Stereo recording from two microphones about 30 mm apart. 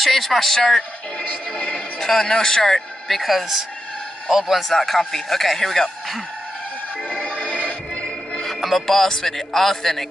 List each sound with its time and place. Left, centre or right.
0.0 s speech: centre
0.5 s speech: centre
2.0 s speech: centre
3.1 s a man's voice: centre
4.6 s speech: centre
7.0 s music: left
7.2 s music: left
8.4 s music: centre
9.5 s speech: centre